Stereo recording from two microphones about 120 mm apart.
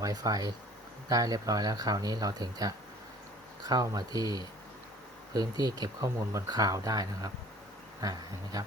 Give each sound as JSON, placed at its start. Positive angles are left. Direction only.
{"t": 0.0, "sound": "speech", "side_deg": -30}